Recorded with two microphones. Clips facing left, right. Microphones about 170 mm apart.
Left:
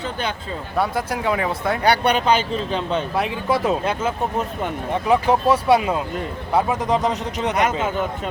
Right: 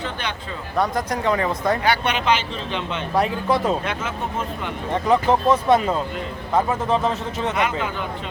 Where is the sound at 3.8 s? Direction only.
30° left (ahead or behind).